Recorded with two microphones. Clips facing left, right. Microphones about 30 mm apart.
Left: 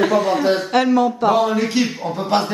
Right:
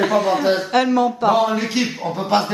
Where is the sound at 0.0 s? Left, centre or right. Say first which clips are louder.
Left 1 dB; centre.